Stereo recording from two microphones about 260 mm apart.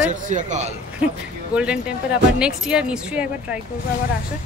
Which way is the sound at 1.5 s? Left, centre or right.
Centre.